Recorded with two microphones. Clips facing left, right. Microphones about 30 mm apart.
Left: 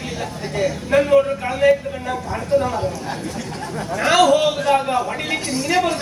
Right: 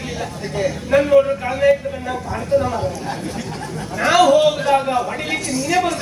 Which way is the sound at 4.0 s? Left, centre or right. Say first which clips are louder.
Right 2 dB; centre.